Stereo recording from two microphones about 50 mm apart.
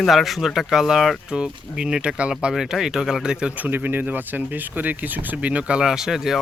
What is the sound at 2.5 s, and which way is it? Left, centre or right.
Speech, centre.